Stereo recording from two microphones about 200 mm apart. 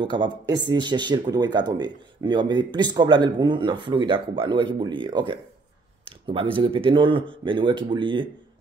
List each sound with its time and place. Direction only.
0.0 s speech: 20° right (ahead or behind)